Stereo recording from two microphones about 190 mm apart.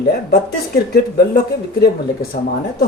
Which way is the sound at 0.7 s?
55° left (ahead or behind).